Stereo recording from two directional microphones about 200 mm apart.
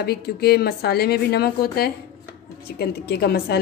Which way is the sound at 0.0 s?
50° left (ahead or behind).